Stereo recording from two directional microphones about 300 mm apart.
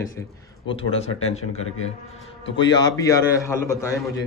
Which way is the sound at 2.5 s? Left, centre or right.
Centre.